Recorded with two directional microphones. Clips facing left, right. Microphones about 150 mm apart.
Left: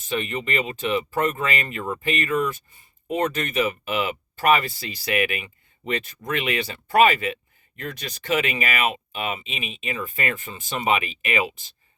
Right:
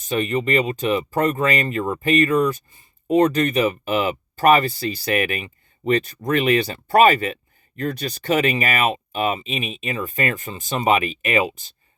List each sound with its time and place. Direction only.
0.0 s speech: 40° right (ahead or behind)